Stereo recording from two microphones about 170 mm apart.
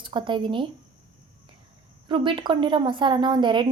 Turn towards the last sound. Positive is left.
turn(degrees=-25)  # may be behind; listen again after turning